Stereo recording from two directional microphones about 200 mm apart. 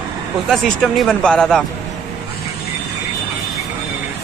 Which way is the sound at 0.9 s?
5° left (ahead or behind).